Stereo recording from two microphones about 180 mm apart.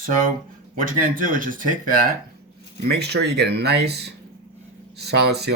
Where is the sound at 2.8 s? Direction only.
65° right (ahead or behind).